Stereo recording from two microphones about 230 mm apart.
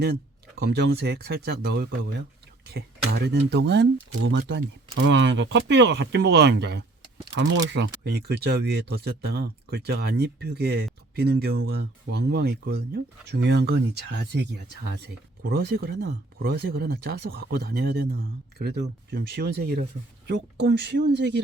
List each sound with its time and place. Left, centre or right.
0.0 s speech: right